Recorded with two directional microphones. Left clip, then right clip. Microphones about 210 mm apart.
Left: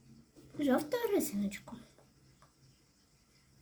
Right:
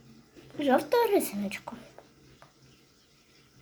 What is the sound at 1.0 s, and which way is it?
Speech, 30° right (ahead or behind).